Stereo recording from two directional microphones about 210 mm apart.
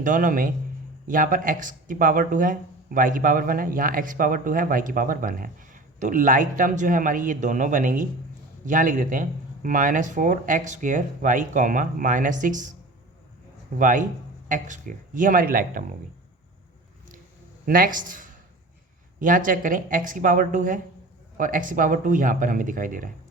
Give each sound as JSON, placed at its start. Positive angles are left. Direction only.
{"t": 0.0, "sound": "speech", "side_deg": -40}
{"t": 13.7, "sound": "speech", "side_deg": -40}
{"t": 17.7, "sound": "speech", "side_deg": -40}